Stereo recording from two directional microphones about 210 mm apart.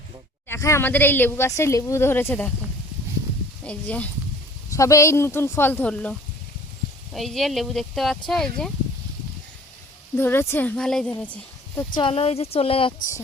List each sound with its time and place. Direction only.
0.4 s speech: 10° left (ahead or behind)
3.6 s speech: 5° left (ahead or behind)
10.2 s speech: 10° left (ahead or behind)
11.9 s a woman's voice: 25° left (ahead or behind)